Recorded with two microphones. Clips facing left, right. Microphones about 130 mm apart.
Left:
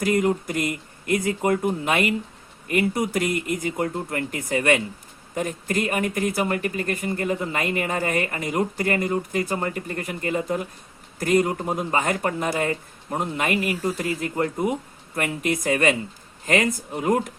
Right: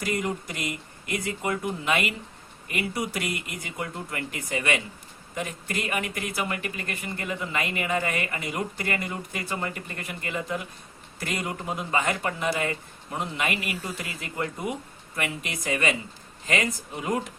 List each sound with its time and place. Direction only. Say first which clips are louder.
0.0 s speech: left 8 dB; 50° left (ahead or behind)